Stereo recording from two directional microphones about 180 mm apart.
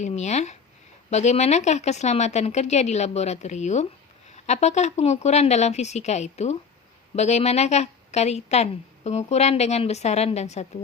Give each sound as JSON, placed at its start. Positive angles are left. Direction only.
{"t": 0.0, "sound": "a woman's voice", "side_deg": 40}